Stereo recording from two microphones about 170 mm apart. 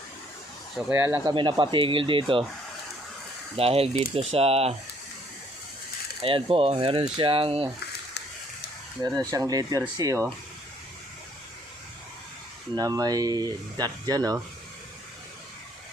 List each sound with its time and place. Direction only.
0.9 s speech: 15° right (ahead or behind)
1.3 s speech: 25° right (ahead or behind)
3.5 s speech: 35° right (ahead or behind)
6.2 s speech: 30° right (ahead or behind)
9.0 s speech: 20° right (ahead or behind)
12.7 s speech: 20° right (ahead or behind)